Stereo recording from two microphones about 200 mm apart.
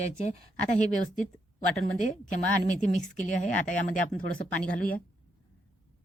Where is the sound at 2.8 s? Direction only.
40° left (ahead or behind).